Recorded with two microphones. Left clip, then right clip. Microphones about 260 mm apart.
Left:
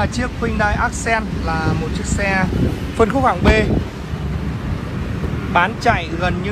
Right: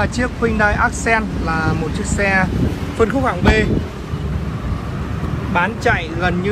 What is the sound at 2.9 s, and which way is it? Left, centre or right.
Speech, centre.